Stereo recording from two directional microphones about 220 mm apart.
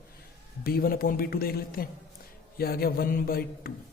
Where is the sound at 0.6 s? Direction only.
45° left (ahead or behind).